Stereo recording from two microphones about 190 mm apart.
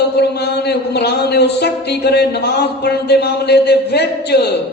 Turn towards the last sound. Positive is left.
turn(degrees=60)  # may be behind; listen again after turning